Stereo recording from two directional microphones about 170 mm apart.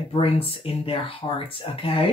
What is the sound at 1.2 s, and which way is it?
Speech, 20° left (ahead or behind).